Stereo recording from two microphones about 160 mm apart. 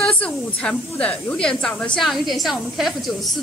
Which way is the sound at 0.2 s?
10° left (ahead or behind).